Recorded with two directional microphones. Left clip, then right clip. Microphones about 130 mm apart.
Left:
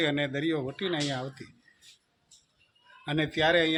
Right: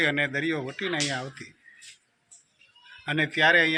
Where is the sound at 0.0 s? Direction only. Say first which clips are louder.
Right 4 dB; 25° left (ahead or behind).